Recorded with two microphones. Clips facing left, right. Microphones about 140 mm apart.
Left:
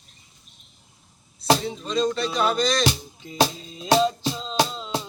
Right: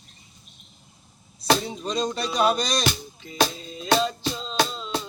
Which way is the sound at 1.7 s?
20° right (ahead or behind).